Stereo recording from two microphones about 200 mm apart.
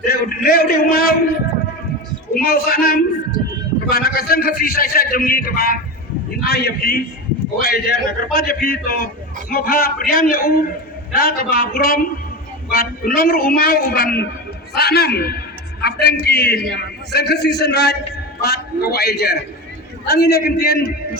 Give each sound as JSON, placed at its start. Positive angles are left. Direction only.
{"t": 0.0, "sound": "a man's voice", "side_deg": 50}
{"t": 2.3, "sound": "a man's voice", "side_deg": 50}